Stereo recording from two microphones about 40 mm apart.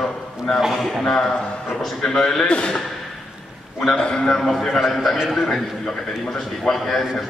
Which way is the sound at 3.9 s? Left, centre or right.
Left.